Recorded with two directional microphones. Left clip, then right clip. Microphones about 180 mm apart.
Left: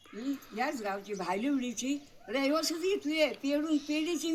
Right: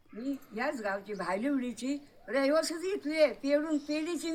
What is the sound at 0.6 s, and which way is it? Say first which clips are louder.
Speech: right 1 dB; 10° right (ahead or behind).